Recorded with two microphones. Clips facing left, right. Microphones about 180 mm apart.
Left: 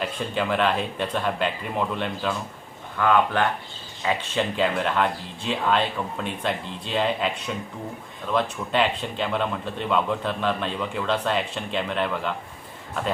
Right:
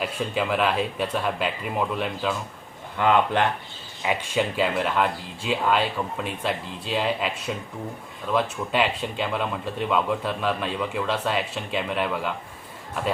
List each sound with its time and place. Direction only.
0.0 s a man's voice: 5° right (ahead or behind)
3.0 s speech: 20° right (ahead or behind)
4.0 s a man's voice: 10° right (ahead or behind)